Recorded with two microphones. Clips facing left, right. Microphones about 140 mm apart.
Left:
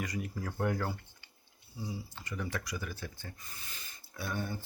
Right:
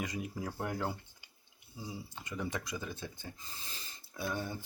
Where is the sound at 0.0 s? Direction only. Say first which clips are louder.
Even; 20° right (ahead or behind).